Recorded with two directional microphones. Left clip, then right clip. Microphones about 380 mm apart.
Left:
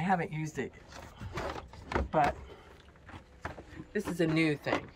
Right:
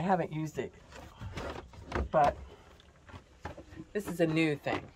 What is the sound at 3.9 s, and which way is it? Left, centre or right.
Speech, centre.